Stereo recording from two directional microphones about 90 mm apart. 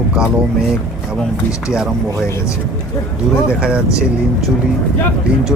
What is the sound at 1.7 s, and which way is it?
Speech, 5° right (ahead or behind).